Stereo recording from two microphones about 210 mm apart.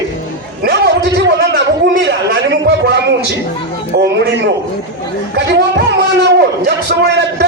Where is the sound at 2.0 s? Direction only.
55° right (ahead or behind).